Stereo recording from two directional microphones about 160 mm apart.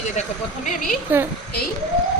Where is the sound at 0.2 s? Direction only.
50° left (ahead or behind).